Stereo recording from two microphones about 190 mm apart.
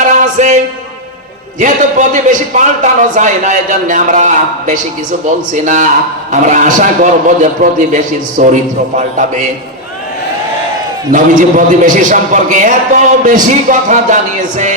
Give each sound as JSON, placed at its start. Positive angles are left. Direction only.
{"t": 0.0, "sound": "a sound", "side_deg": -40}
{"t": 1.5, "sound": "a man's voice", "side_deg": -40}
{"t": 11.1, "sound": "a man's voice", "side_deg": -45}